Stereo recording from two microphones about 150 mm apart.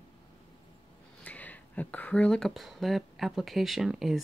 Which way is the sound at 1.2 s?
10° left (ahead or behind).